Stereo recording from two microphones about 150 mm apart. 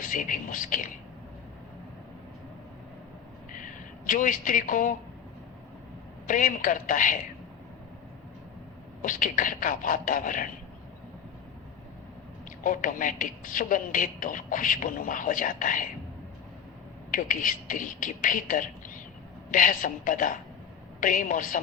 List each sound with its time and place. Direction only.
0.0 s speech: 65° left (ahead or behind)
3.5 s a sound: 60° left (ahead or behind)
6.2 s a woman's voice: 65° left (ahead or behind)
9.0 s a woman's voice: 65° left (ahead or behind)
12.6 s a woman's voice: 65° left (ahead or behind)
17.1 s a woman's voice: 65° left (ahead or behind)